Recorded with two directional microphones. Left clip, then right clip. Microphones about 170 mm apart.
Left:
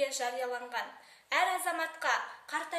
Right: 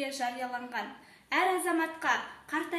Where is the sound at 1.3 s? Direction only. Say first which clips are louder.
Right 2 dB; 65° left (ahead or behind).